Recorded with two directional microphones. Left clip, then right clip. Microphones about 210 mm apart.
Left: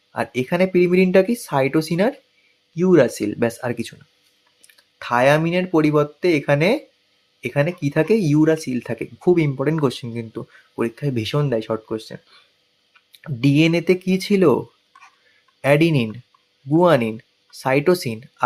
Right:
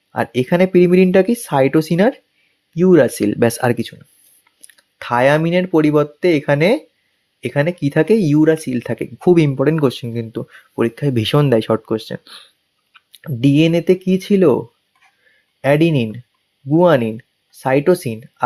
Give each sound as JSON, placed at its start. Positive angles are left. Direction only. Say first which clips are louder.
{"t": 0.1, "sound": "speech", "louder": "right 5 dB", "side_deg": -25}
{"t": 15.6, "sound": "speech", "louder": "right 2 dB", "side_deg": -20}